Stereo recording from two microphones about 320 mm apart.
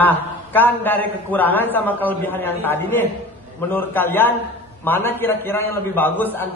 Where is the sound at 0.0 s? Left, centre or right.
Centre.